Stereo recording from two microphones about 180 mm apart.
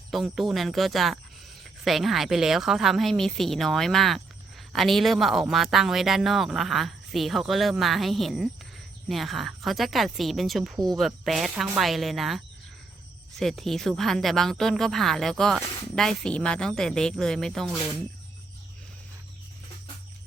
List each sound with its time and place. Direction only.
0.1 s speech: centre (ahead or behind)
13.4 s speech: centre (ahead or behind)